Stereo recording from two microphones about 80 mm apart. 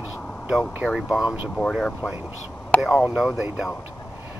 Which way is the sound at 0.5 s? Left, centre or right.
Centre.